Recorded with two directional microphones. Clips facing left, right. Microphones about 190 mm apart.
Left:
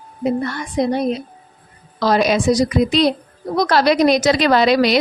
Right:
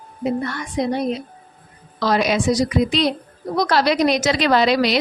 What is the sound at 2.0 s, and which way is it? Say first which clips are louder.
A woman's voice: left 3 dB; 40° left (ahead or behind).